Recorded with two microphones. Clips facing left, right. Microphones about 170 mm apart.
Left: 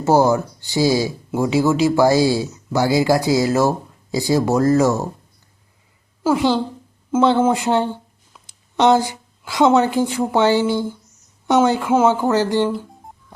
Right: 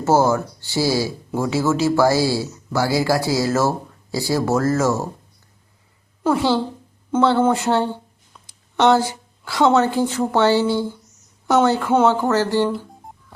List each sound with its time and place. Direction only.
0.0 s speech: 15° left (ahead or behind)
6.3 s speech: 15° left (ahead or behind)